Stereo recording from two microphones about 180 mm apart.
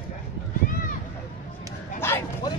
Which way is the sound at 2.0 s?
15° left (ahead or behind).